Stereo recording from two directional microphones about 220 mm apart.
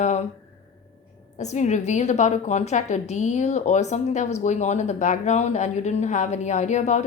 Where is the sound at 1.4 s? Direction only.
30° left (ahead or behind).